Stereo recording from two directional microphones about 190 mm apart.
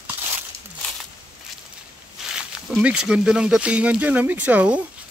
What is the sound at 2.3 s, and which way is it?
Speech, 5° right (ahead or behind).